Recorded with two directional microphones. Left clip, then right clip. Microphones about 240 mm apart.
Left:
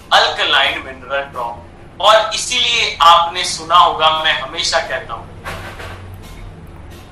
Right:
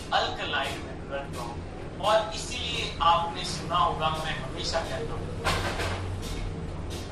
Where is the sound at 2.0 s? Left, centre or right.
Left.